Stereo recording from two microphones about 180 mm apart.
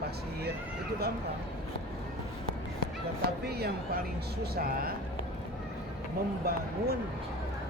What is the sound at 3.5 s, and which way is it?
Speech, 60° right (ahead or behind).